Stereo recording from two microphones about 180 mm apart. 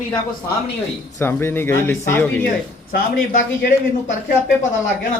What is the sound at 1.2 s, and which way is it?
Speech, 10° left (ahead or behind).